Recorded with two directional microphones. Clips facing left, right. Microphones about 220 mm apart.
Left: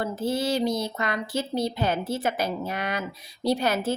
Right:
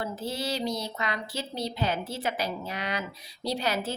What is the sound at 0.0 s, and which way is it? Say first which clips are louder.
Speech: left 6 dB; 50° left (ahead or behind).